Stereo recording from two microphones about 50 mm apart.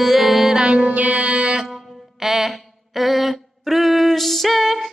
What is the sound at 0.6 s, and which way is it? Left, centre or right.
Music, right.